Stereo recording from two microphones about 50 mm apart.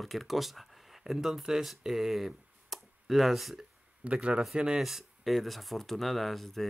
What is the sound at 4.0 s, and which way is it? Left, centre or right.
Speech, right.